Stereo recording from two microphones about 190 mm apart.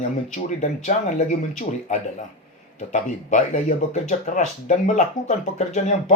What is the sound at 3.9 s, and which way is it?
Speech, 40° left (ahead or behind).